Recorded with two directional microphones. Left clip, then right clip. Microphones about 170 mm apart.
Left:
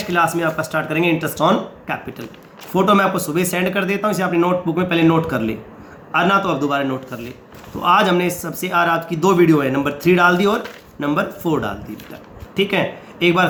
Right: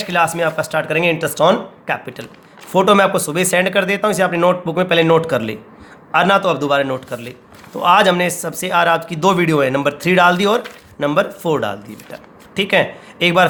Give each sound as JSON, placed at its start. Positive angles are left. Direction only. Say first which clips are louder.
{"t": 0.0, "sound": "speech", "louder": "right 2 dB", "side_deg": -50}